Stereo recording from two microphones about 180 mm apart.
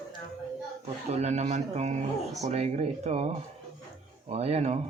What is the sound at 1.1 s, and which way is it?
Speech, 40° right (ahead or behind).